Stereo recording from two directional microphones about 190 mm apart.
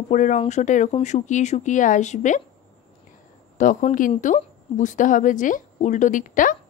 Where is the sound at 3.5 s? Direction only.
40° left (ahead or behind).